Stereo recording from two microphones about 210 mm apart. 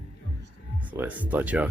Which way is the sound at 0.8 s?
10° right (ahead or behind).